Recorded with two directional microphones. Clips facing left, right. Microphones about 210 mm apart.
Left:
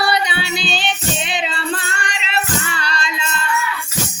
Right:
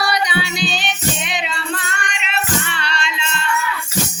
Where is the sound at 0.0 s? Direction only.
25° left (ahead or behind).